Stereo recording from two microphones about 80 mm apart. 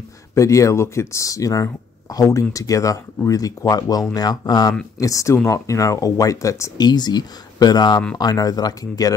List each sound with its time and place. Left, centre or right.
0.3 s speech: left
4.9 s speech: left
6.8 s speech: left